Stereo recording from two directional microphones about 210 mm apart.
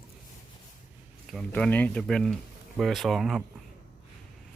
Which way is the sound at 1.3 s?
5° left (ahead or behind).